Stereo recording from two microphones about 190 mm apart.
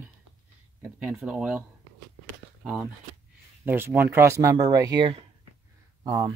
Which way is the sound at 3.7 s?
10° right (ahead or behind).